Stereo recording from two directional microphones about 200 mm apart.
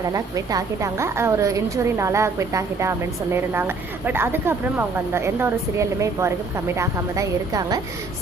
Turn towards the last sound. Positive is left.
turn(degrees=-15)  # may be behind; listen again after turning